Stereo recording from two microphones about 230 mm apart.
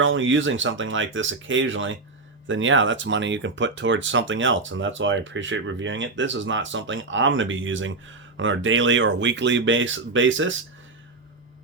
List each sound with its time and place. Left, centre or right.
0.0 s speech: right